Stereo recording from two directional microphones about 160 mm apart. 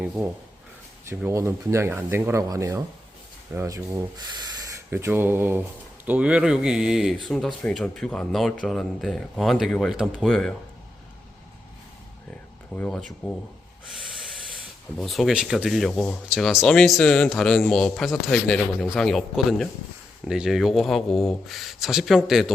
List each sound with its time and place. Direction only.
1.1 s speech: 15° right (ahead or behind); by 10.5 s 5° left (ahead or behind)
12.7 s speech: 5° left (ahead or behind)
14.9 s speech: centre (ahead or behind)